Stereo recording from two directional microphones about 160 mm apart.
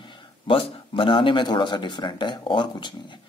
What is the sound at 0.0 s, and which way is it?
A man's voice, 30° left (ahead or behind).